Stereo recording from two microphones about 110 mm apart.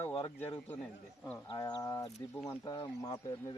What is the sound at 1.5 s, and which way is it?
A man's voice, 40° left (ahead or behind).